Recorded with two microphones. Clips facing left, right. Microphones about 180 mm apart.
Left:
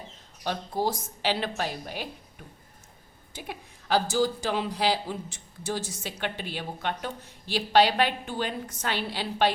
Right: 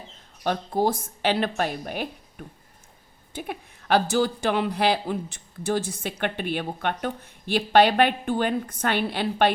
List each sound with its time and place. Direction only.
0.4 s speech: 55° right (ahead or behind)
3.3 s speech: 55° right (ahead or behind)